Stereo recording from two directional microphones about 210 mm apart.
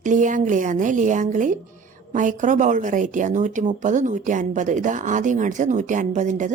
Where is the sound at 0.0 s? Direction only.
35° right (ahead or behind).